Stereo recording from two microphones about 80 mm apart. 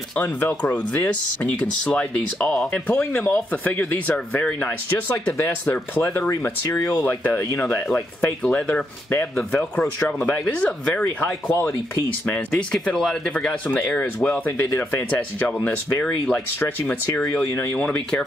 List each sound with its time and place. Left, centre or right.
0.2 s speech: centre
2.9 s speech: left
6.8 s speech: left
7.1 s speech: left
8.4 s speech: centre
9.9 s speech: centre
13.7 s speech: left
17.3 s speech: left
17.7 s speech: centre